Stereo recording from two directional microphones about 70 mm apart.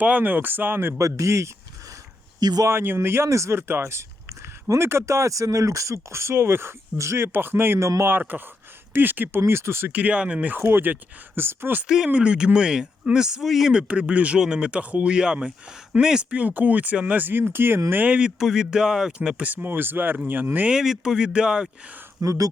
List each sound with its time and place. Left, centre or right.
0.0 s speech: right
0.9 s speech: right
2.4 s speech: right
2.6 s speech: right
3.7 s speech: right
9.9 s speech: centre
10.6 s speech: right
12.0 s speech: centre; by 17.7 s right
17.9 s speech: right
18.3 s speech: centre
19.4 s speech: right
20.7 s speech: centre
22.2 s speech: right